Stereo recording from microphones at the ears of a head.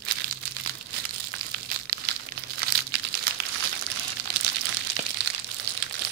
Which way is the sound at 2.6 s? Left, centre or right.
Right.